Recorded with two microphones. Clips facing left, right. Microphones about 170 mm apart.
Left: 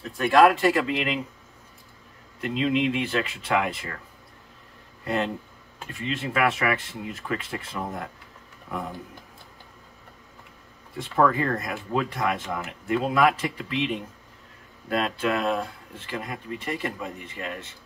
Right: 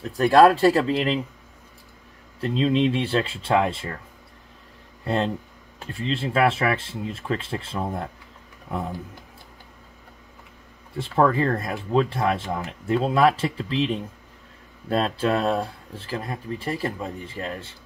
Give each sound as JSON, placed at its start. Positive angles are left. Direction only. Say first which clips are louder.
{"t": 0.1, "sound": "speech", "louder": "right 3 dB", "side_deg": -35}
{"t": 2.4, "sound": "speech", "louder": "right 3 dB", "side_deg": -30}
{"t": 5.0, "sound": "speech", "louder": "right 3 dB", "side_deg": -30}
{"t": 11.0, "sound": "speech", "louder": "right 2 dB", "side_deg": -30}
{"t": 14.9, "sound": "speech", "louder": "right 3 dB", "side_deg": -30}